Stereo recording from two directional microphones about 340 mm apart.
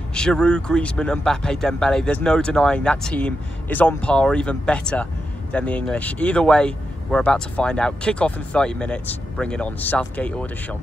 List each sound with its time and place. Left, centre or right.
0.1 s speech: centre